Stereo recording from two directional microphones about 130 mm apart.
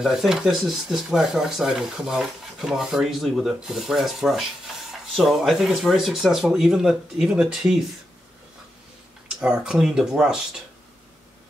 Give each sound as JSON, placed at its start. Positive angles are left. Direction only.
{"t": 0.0, "sound": "speech", "side_deg": -5}
{"t": 9.4, "sound": "speech", "side_deg": -5}